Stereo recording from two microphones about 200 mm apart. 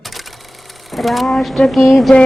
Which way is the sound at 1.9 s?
Centre (ahead or behind).